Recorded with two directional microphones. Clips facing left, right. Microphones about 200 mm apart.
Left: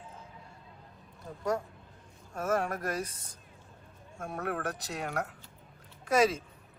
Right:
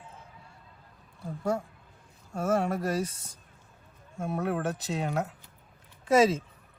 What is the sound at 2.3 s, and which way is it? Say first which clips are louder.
Speech: right 4 dB; 25° right (ahead or behind).